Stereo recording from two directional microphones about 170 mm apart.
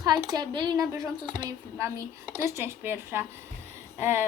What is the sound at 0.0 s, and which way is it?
A woman's voice, 25° right (ahead or behind).